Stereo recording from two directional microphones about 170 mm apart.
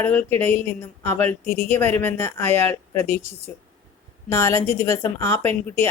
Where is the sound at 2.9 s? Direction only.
40° right (ahead or behind).